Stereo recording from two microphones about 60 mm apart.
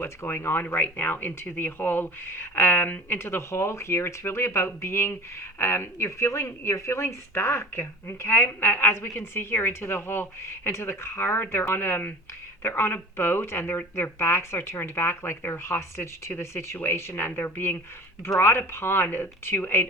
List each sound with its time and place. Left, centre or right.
0.0 s speech: left